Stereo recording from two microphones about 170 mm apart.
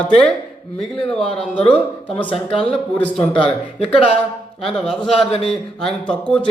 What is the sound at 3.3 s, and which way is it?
Speech, 35° left (ahead or behind).